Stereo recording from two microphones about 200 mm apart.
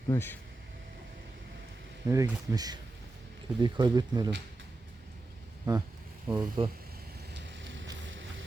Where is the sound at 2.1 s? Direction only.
15° right (ahead or behind).